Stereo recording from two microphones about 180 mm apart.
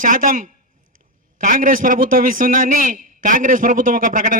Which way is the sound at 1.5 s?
50° right (ahead or behind).